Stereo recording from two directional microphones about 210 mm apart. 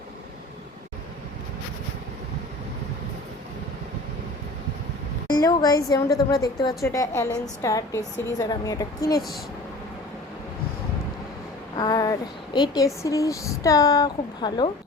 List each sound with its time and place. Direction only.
5.3 s a woman's voice: 20° left (ahead or behind)
11.8 s a sound: 20° left (ahead or behind)
12.5 s speech: 20° left (ahead or behind)